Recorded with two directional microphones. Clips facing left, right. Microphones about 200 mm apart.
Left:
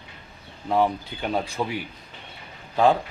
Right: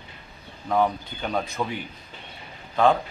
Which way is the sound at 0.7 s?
5° left (ahead or behind).